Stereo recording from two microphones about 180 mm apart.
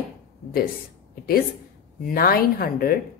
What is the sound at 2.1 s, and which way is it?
Speech, 55° left (ahead or behind).